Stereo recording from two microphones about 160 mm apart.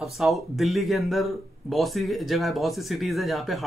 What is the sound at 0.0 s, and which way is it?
Speech, centre (ahead or behind).